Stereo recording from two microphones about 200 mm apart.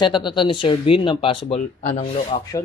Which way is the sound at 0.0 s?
25° left (ahead or behind).